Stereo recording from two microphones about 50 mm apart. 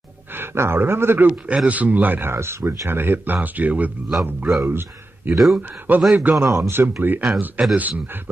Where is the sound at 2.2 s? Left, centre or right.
Right.